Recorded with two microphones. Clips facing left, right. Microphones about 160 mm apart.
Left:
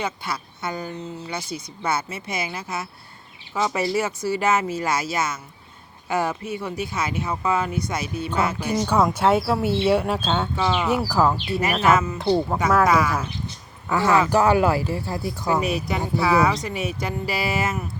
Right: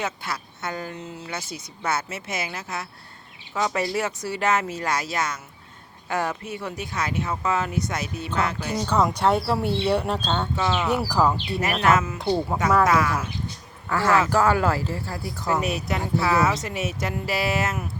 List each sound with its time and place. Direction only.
0.0 s speech: centre (ahead or behind)
13.8 s speech: 15° left (ahead or behind)
15.4 s speech: centre (ahead or behind)